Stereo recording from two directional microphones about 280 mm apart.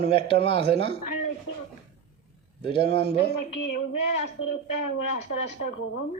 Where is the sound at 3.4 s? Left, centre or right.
Left.